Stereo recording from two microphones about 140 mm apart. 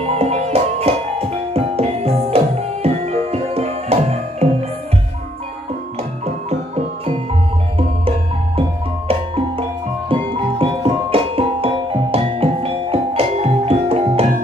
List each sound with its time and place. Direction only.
0.0 s music: 45° right (ahead or behind)
8.5 s music: 45° right (ahead or behind)